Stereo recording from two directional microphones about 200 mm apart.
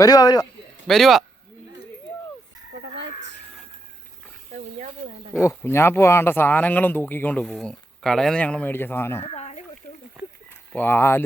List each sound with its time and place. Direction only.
0.0 s speech: 20° left (ahead or behind)
0.9 s speech: centre (ahead or behind)
4.5 s roaring cats: 35° right (ahead or behind)
5.3 s speech: 10° left (ahead or behind)
9.3 s a sound: 35° left (ahead or behind)
10.8 s speech: 10° left (ahead or behind)